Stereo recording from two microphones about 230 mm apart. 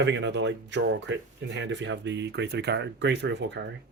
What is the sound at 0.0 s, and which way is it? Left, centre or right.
Speech, right.